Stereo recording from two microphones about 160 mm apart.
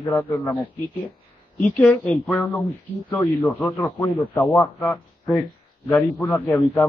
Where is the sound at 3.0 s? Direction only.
15° left (ahead or behind).